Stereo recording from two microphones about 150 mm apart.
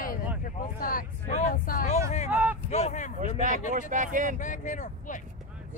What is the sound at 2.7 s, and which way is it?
Speech, 50° left (ahead or behind).